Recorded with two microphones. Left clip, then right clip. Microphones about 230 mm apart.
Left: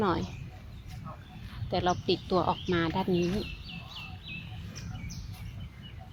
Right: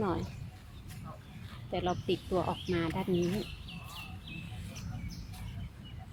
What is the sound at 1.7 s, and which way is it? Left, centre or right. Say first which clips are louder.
Speech: left 5 dB; left.